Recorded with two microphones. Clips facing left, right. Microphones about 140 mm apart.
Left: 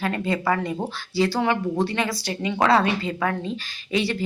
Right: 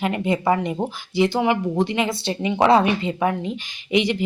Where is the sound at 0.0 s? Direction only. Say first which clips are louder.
Right 3 dB; 20° right (ahead or behind).